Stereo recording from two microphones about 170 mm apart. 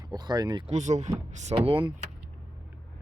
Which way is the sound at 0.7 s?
40° right (ahead or behind).